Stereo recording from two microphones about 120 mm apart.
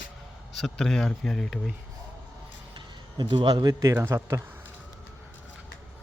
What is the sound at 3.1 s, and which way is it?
Speech, 40° right (ahead or behind).